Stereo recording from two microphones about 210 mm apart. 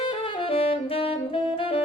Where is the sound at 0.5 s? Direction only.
25° left (ahead or behind).